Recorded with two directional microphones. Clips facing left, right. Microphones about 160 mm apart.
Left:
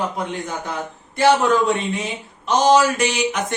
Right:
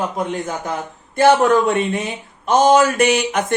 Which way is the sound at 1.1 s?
55° right (ahead or behind).